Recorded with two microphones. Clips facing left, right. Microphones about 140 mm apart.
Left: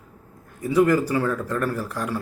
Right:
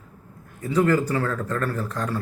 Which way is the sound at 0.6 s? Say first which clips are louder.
Left 2 dB; 10° left (ahead or behind).